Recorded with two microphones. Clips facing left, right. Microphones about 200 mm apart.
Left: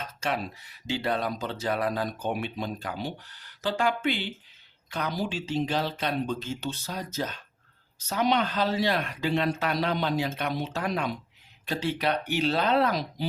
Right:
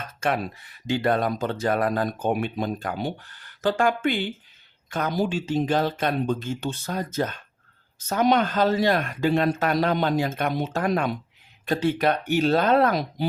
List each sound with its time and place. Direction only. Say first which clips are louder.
0.0 s speech: right 5 dB; 55° right (ahead or behind)